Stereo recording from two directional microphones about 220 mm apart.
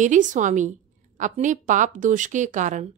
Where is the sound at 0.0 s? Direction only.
35° right (ahead or behind).